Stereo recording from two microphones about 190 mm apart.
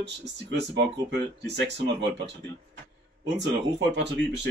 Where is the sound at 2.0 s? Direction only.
65° right (ahead or behind).